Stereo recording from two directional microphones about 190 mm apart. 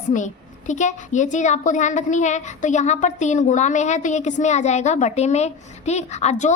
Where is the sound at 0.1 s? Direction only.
45° left (ahead or behind).